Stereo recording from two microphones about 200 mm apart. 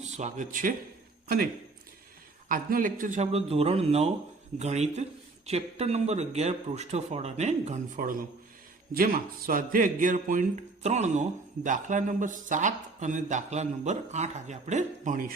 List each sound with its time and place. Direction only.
0.0 s speech: 35° right (ahead or behind)
2.5 s speech: 45° right (ahead or behind)
9.5 s speech: 45° right (ahead or behind)